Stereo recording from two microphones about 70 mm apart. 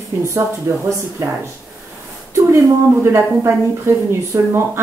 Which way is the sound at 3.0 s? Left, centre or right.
Right.